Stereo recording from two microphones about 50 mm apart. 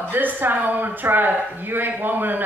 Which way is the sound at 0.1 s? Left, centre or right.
Right.